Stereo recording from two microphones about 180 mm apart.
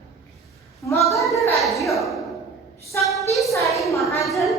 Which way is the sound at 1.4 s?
Centre (ahead or behind).